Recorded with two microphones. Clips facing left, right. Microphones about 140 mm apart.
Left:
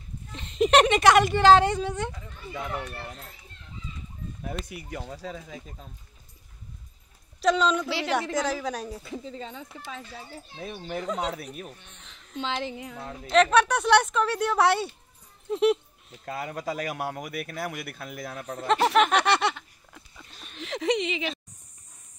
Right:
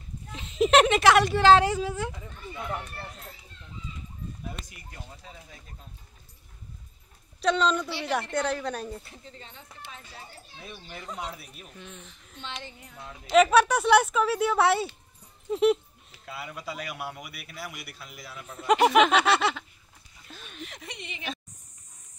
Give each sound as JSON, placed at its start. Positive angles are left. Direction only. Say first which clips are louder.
{"t": 0.3, "sound": "speech", "louder": "even", "side_deg": -5}
{"t": 4.9, "sound": "speech", "louder": "left 11 dB", "side_deg": 90}
{"t": 7.4, "sound": "speech", "louder": "left 2 dB", "side_deg": 0}
{"t": 10.7, "sound": "a man's voice", "louder": "left 10 dB", "side_deg": 50}
{"t": 11.1, "sound": "speech", "louder": "left 6 dB", "side_deg": 90}
{"t": 12.4, "sound": "speech", "louder": "left 10 dB", "side_deg": 90}
{"t": 13.3, "sound": "speech", "louder": "right 1 dB", "side_deg": -5}
{"t": 15.5, "sound": "a sound", "louder": "even", "side_deg": 0}
{"t": 16.3, "sound": "a man's voice", "louder": "left 6 dB", "side_deg": 45}
{"t": 19.0, "sound": "speech", "louder": "even", "side_deg": -5}
{"t": 20.5, "sound": "speech", "louder": "left 17 dB", "side_deg": 90}